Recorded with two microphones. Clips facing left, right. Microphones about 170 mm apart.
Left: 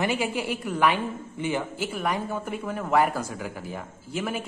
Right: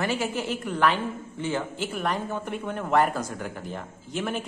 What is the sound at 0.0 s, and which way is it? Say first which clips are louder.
A woman's voice: left 1 dB; 15° left (ahead or behind).